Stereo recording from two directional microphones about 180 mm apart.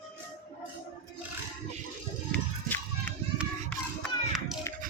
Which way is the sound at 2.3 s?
10° left (ahead or behind).